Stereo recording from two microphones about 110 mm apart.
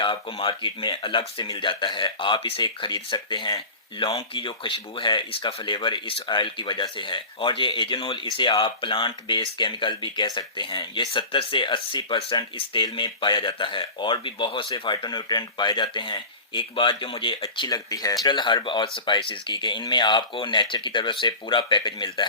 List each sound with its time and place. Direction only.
0.0 s speech: 50° left (ahead or behind)
17.6 s speech: 35° left (ahead or behind)